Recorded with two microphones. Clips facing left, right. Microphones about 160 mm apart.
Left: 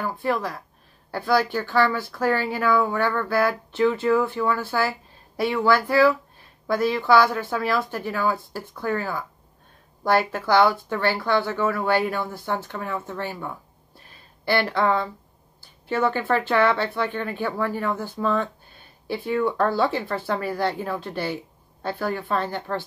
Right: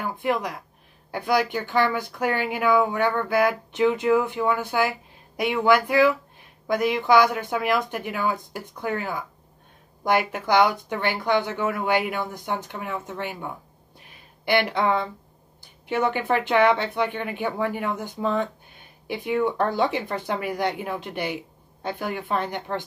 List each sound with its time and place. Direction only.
0.0 s speech: 15° right (ahead or behind)
13.9 s a sound: 15° right (ahead or behind)
15.9 s speech: 20° right (ahead or behind)